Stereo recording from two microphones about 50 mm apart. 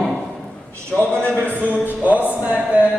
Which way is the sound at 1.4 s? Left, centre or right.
Right.